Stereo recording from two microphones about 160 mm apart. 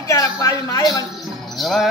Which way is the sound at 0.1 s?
20° left (ahead or behind).